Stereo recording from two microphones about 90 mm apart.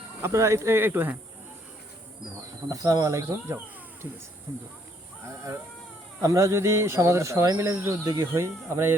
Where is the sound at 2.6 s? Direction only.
45° right (ahead or behind).